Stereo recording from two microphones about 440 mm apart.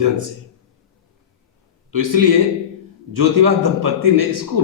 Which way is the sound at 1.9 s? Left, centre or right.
Right.